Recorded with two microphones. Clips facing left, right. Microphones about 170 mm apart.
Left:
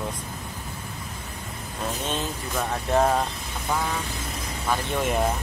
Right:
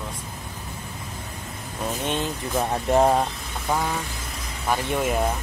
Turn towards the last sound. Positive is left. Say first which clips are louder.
# right 2 dB
turn(degrees=-15)  # may be behind; listen again after turning